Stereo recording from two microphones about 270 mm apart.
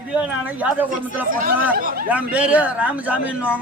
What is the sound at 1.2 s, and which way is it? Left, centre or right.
Speech, right.